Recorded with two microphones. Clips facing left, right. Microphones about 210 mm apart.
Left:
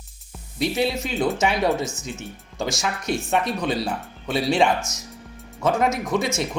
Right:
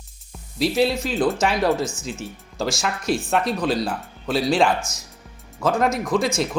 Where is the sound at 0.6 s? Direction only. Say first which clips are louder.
Right 3 dB; centre (ahead or behind).